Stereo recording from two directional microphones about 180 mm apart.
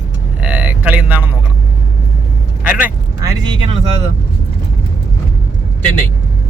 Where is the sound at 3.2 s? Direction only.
20° right (ahead or behind).